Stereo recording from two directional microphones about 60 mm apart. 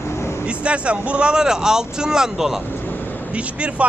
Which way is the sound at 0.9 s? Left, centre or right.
Right.